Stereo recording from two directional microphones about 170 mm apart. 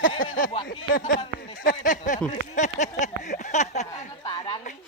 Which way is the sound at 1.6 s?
50° left (ahead or behind).